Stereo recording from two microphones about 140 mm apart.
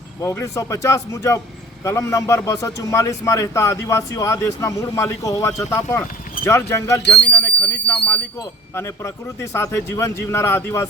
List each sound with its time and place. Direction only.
0.2 s a man's voice: 20° left (ahead or behind)
7.3 s a sound: 10° left (ahead or behind)
8.7 s a man's voice: 15° left (ahead or behind)